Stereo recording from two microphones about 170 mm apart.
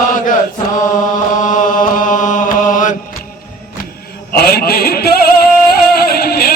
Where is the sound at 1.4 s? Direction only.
50° left (ahead or behind).